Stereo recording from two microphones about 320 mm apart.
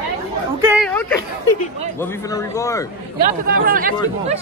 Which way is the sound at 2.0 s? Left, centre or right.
Centre.